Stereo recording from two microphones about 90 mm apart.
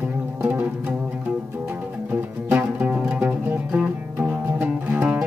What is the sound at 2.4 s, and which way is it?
Music, 15° right (ahead or behind).